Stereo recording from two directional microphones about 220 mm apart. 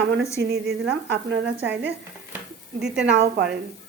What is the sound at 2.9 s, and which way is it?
Speech, 50° right (ahead or behind).